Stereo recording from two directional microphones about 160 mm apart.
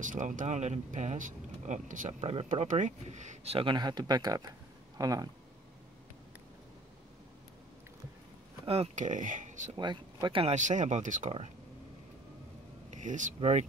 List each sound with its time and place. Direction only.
0.0 s speech: 55° right (ahead or behind); by 5.3 s 25° right (ahead or behind)
8.6 s speech: 40° right (ahead or behind)
9.8 s speech: 25° right (ahead or behind)
10.5 s speech: 50° right (ahead or behind)
12.9 s speech: 50° right (ahead or behind)